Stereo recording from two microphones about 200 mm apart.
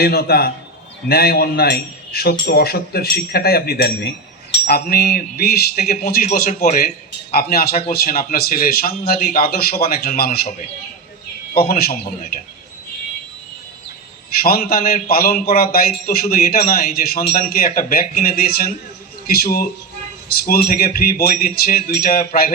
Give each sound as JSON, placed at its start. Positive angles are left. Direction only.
{"t": 0.0, "sound": "a man's voice", "side_deg": 50}
{"t": 11.5, "sound": "a man's voice", "side_deg": 50}
{"t": 14.3, "sound": "a man's voice", "side_deg": 50}